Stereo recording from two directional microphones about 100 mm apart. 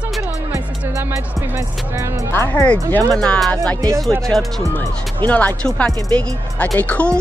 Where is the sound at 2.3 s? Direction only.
25° left (ahead or behind).